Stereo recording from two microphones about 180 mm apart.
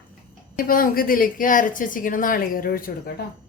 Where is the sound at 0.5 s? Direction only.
55° left (ahead or behind).